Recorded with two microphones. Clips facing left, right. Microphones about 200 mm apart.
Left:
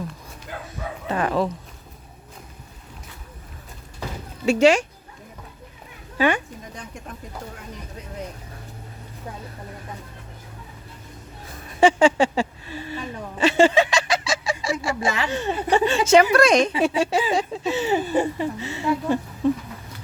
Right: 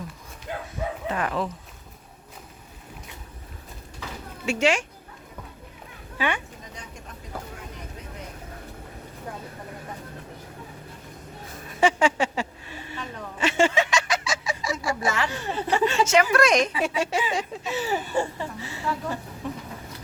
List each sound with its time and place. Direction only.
1.0 s speech: 35° left (ahead or behind)
4.4 s speech: 35° left (ahead or behind)
6.1 s speech: 40° left (ahead or behind)
11.8 s a sound: 30° left (ahead or behind)
13.4 s snicker: 35° left (ahead or behind)
15.7 s a woman's voice: 30° left (ahead or behind)